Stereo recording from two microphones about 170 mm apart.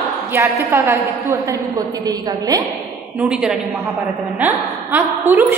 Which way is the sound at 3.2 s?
5° right (ahead or behind).